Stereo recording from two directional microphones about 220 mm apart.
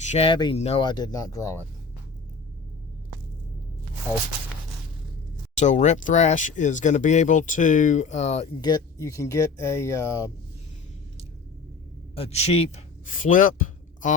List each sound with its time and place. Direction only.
0.0 s speech: 30° left (ahead or behind); by 1.6 s 15° left (ahead or behind)
5.5 s speech: 30° left (ahead or behind)
8.6 s speech: 15° left (ahead or behind)
12.1 s a man's voice: 25° left (ahead or behind)